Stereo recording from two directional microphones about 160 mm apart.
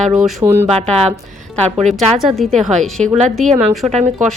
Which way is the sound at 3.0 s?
40° right (ahead or behind).